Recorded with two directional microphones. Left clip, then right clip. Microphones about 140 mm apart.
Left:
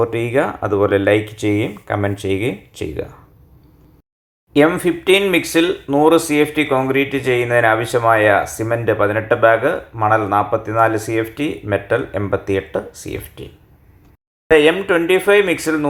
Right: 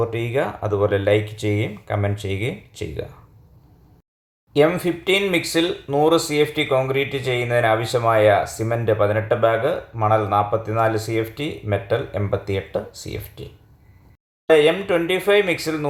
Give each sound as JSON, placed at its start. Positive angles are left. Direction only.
{"t": 0.0, "sound": "speech", "side_deg": 20}
{"t": 4.5, "sound": "speech", "side_deg": 10}
{"t": 14.5, "sound": "speech", "side_deg": 15}